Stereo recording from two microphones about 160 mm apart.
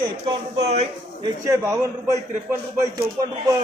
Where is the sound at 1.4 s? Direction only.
20° right (ahead or behind).